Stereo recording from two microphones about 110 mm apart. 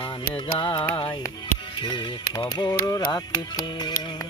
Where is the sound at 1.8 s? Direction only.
40° left (ahead or behind).